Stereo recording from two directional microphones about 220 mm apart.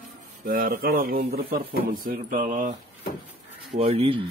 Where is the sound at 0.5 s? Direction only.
40° right (ahead or behind).